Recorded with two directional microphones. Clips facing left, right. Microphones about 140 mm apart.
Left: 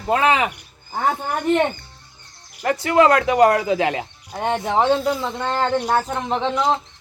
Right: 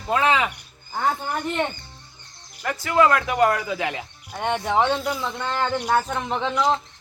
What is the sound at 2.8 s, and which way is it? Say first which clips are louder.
Speech: left 3 dB; 25° left (ahead or behind).